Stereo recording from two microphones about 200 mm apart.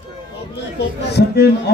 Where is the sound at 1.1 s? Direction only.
55° left (ahead or behind).